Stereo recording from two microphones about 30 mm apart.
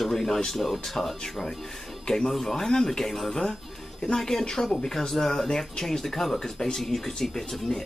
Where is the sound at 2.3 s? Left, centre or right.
Centre.